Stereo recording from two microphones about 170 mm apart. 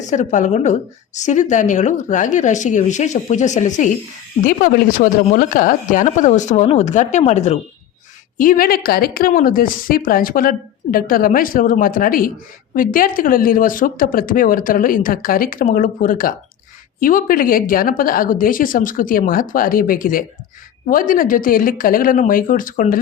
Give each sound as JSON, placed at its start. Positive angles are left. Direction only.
{"t": 0.0, "sound": "a woman's voice", "side_deg": 45}
{"t": 8.4, "sound": "speech", "side_deg": 55}